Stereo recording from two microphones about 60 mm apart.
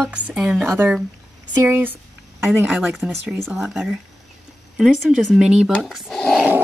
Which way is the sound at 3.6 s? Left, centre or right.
Centre.